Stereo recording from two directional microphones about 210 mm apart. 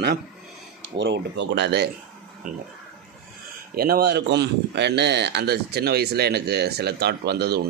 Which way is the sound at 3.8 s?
45° right (ahead or behind).